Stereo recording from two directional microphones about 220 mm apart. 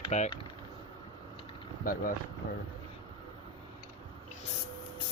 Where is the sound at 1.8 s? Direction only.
40° left (ahead or behind).